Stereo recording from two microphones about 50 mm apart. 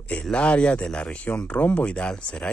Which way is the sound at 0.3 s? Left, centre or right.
Left.